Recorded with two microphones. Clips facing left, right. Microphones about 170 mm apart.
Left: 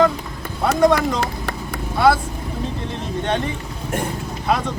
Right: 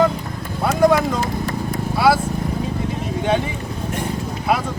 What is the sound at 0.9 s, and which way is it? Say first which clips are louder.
Vehicle: right 1 dB; 65° left (ahead or behind).